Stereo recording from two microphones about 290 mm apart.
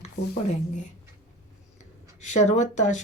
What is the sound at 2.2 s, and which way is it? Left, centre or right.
Speech, left.